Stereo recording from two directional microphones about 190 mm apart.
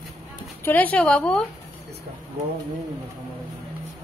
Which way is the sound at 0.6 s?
10° left (ahead or behind).